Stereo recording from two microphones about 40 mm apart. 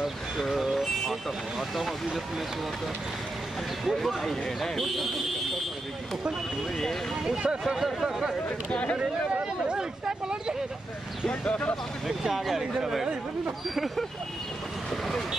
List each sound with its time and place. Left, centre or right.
0.5 s vehicle: centre
3.8 s speech: centre
7.2 s speech: centre
8.9 s speech: right
12.1 s speech: centre